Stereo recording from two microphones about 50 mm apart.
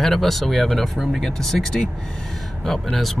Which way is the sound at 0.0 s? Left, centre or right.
Centre.